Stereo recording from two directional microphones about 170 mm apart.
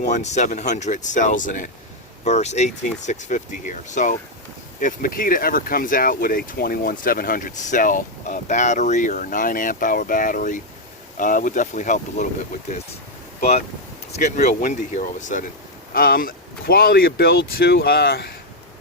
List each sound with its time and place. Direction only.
0.0 s speech: 45° left (ahead or behind)
14.2 s speech: 50° left (ahead or behind)
15.9 s speech: 60° left (ahead or behind)